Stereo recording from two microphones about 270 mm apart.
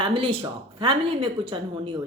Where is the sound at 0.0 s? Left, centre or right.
Right.